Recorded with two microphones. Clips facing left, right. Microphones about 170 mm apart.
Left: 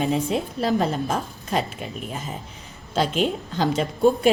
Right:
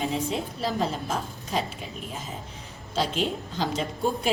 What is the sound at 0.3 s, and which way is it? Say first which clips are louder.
Speech: left 6 dB; 60° left (ahead or behind).